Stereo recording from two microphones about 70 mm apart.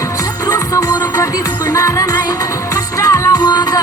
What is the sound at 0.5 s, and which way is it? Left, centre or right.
Music, left.